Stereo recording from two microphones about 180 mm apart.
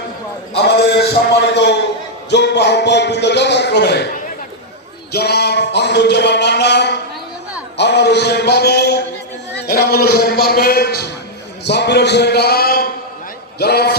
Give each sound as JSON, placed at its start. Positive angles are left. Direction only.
{"t": 0.5, "sound": "a man's voice", "side_deg": 65}
{"t": 5.1, "sound": "a man's voice", "side_deg": 65}
{"t": 11.6, "sound": "a man's voice", "side_deg": 70}